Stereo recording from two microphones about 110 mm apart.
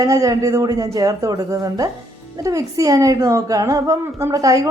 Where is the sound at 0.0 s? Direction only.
30° right (ahead or behind).